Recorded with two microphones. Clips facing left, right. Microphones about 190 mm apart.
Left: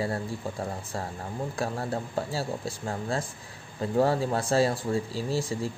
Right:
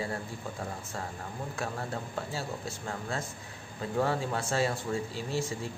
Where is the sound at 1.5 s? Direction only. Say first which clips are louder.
Left 5 dB; 35° left (ahead or behind).